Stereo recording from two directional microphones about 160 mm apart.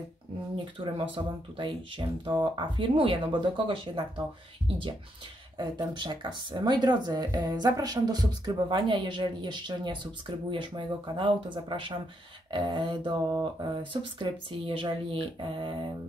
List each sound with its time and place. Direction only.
0.7 s speech: 35° right (ahead or behind)
5.6 s speech: 25° right (ahead or behind)
14.7 s speech: 30° right (ahead or behind)